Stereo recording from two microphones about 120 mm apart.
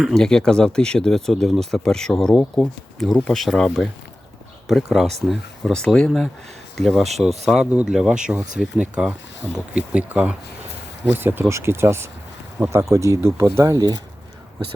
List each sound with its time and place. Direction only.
0.0 s speech: 5° left (ahead or behind); by 14.0 s 30° right (ahead or behind)